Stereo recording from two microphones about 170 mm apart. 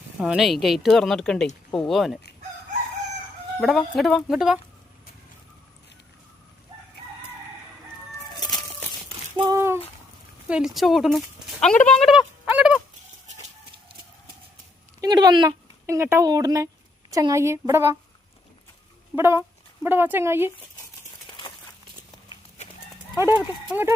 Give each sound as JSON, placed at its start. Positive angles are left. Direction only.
{"t": 0.2, "sound": "speech", "side_deg": -5}
{"t": 3.6, "sound": "speech", "side_deg": 0}
{"t": 9.6, "sound": "a sound", "side_deg": -15}
{"t": 10.5, "sound": "speech", "side_deg": 0}
{"t": 11.9, "sound": "a sound", "side_deg": 0}
{"t": 15.0, "sound": "a woman's voice", "side_deg": -25}
{"t": 19.1, "sound": "speech", "side_deg": -15}
{"t": 21.2, "sound": "crumpling", "side_deg": 25}
{"t": 22.6, "sound": "clip-clop", "side_deg": 45}
{"t": 23.1, "sound": "a woman's voice", "side_deg": -15}